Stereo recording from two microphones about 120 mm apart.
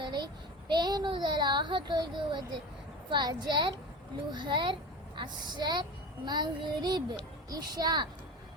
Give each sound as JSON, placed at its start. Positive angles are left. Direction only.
{"t": 0.0, "sound": "child singing", "side_deg": -40}
{"t": 0.7, "sound": "a child's voice", "side_deg": -35}